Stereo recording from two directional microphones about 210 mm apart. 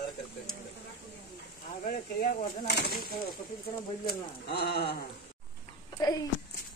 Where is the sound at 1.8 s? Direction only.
40° left (ahead or behind).